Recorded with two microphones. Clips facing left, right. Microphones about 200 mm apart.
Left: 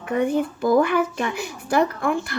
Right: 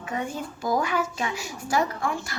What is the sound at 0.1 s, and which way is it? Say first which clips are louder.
Speech: left 10 dB; 60° left (ahead or behind).